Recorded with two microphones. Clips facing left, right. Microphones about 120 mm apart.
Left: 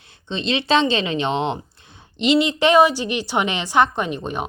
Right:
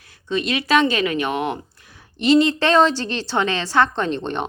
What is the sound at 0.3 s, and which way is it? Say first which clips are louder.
A woman's voice: even; 25° left (ahead or behind).